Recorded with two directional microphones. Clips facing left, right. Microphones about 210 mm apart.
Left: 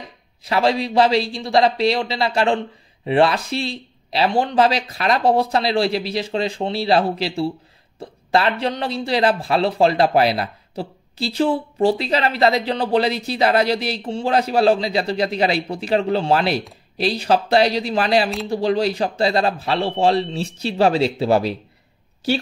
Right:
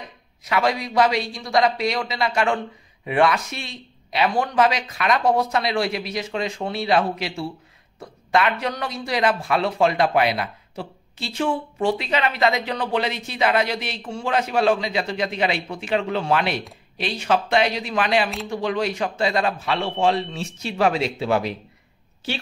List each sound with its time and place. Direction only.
0.4 s a man's voice: 30° left (ahead or behind)